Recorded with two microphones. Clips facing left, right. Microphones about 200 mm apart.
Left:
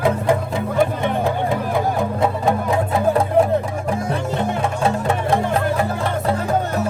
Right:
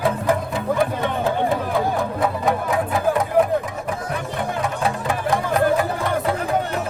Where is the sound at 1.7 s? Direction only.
25° left (ahead or behind).